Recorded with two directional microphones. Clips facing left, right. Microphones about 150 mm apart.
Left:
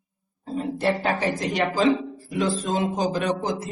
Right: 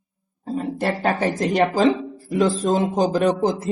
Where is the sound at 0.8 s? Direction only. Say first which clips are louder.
Right 2 dB; 50° right (ahead or behind).